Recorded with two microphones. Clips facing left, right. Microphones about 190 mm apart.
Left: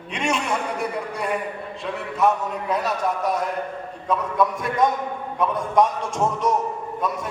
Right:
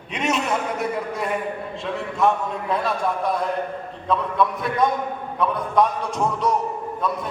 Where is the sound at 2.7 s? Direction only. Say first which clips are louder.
Right 1 dB; 40° left (ahead or behind).